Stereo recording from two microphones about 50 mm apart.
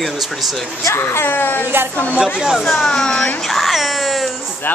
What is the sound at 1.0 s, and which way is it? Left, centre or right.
Speech, left.